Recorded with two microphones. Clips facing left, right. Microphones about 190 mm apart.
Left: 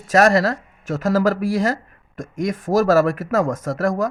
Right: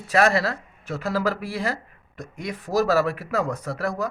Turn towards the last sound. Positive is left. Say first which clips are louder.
# left 7 dB
turn(degrees=45)  # may be behind; listen again after turning